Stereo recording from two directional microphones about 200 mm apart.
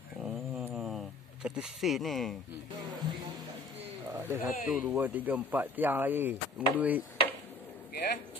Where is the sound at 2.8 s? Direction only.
20° right (ahead or behind).